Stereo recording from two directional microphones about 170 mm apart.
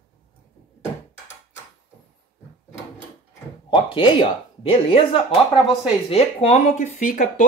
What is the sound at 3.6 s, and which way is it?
Speech, 30° left (ahead or behind).